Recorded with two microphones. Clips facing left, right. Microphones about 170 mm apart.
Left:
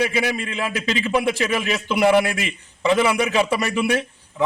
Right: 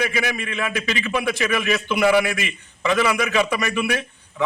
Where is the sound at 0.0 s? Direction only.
30° left (ahead or behind).